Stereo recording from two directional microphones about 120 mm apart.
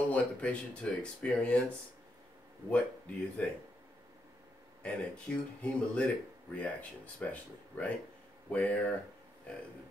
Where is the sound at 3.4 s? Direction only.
10° left (ahead or behind).